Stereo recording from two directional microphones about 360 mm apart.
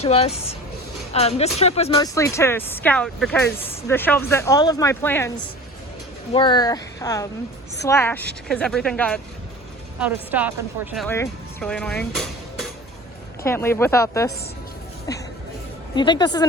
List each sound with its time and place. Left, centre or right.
0.0 s speech: centre
6.3 s a woman's voice: centre
16.0 s speech: centre